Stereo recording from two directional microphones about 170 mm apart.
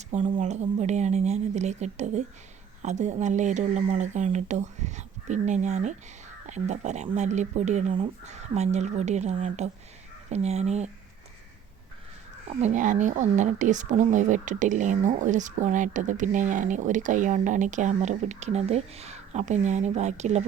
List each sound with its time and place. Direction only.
0.3 s a woman's voice: 45° right (ahead or behind)
12.5 s a woman's voice: 40° right (ahead or behind)